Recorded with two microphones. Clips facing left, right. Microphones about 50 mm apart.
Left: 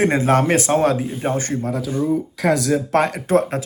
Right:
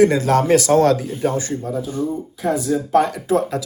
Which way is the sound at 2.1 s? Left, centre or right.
Left.